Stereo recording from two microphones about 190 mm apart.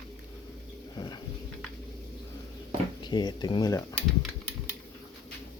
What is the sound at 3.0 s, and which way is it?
Speech, 20° left (ahead or behind).